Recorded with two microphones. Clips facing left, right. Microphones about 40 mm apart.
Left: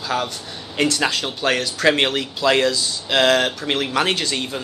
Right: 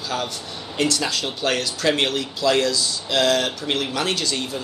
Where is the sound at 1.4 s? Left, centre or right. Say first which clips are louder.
Left 4 dB; left.